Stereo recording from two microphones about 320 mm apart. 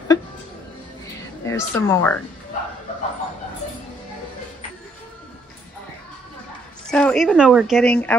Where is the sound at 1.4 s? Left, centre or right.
Centre.